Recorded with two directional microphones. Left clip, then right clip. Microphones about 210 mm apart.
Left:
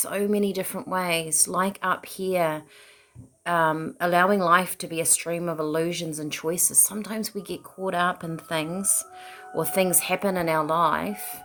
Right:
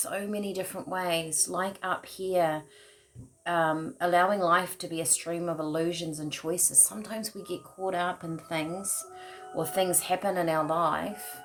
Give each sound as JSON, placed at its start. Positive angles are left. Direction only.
{"t": 0.0, "sound": "speech", "side_deg": 45}